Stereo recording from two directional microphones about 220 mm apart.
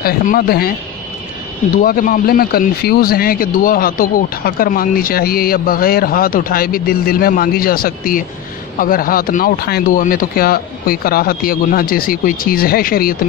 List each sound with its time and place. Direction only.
0.0 s speech: 40° left (ahead or behind)
1.8 s speech: 40° left (ahead or behind)